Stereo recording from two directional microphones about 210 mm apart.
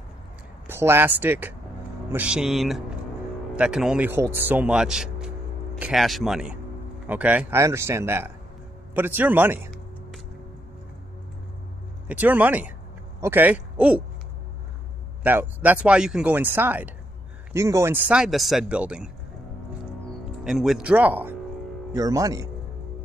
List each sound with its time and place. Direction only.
0.7 s a man's voice: 10° right (ahead or behind)
12.1 s speech: 10° right (ahead or behind)
15.2 s a man's voice: 10° right (ahead or behind)
20.4 s speech: centre (ahead or behind)